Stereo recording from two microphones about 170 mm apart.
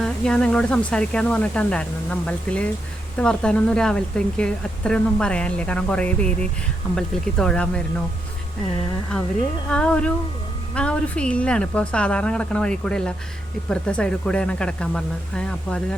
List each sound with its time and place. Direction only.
0.0 s a woman's voice: 5° left (ahead or behind)
9.6 s a woman's voice: 5° left (ahead or behind)